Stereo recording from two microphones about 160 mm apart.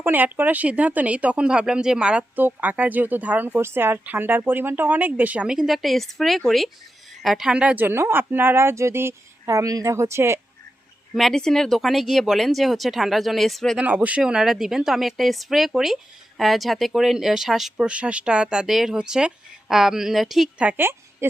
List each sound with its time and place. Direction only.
0.0 s speech: 10° right (ahead or behind)
11.1 s speech: centre (ahead or behind)
13.8 s speech: 10° right (ahead or behind)